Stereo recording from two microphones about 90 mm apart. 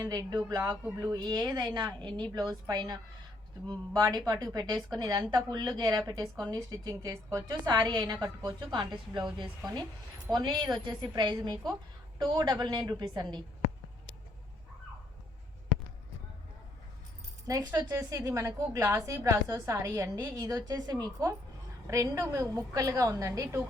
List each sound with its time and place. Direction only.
0.0 s a woman's voice: 45° right (ahead or behind)
13.0 s a woman's voice: 50° right (ahead or behind)
17.6 s a woman's voice: 50° right (ahead or behind); by 20.1 s 35° right (ahead or behind)
20.3 s a woman's voice: 50° right (ahead or behind)